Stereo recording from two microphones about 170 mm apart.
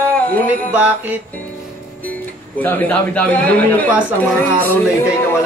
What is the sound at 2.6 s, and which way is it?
Music, 10° left (ahead or behind).